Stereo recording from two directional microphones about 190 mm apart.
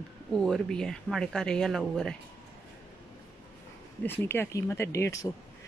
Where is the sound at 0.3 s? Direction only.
5° left (ahead or behind).